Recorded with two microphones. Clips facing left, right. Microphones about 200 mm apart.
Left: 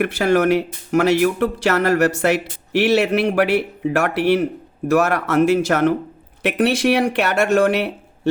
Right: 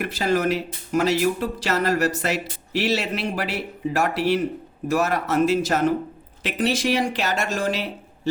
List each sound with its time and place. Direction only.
0.0 s speech: 60° left (ahead or behind)